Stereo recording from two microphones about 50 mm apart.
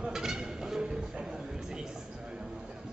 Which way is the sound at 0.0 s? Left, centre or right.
Centre.